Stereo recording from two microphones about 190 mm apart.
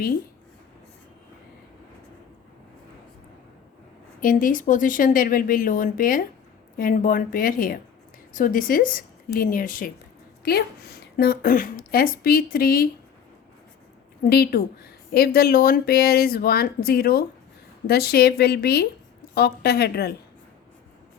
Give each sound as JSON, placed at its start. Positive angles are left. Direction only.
{"t": 4.2, "sound": "a woman's voice", "side_deg": 45}
{"t": 14.3, "sound": "a woman's voice", "side_deg": 55}